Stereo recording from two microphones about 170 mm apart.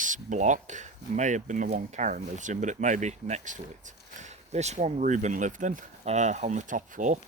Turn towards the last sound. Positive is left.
turn(degrees=-50)  # may be behind; listen again after turning